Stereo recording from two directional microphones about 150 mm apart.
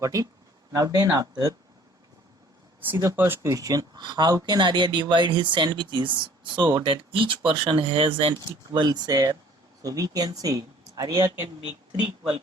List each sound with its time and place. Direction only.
0.0 s speech: 20° right (ahead or behind)
2.8 s speech: 15° right (ahead or behind)